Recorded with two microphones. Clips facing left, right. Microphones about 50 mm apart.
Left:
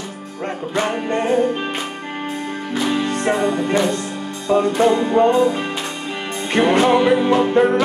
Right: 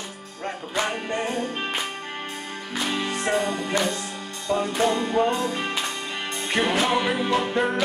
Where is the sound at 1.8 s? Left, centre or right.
Centre.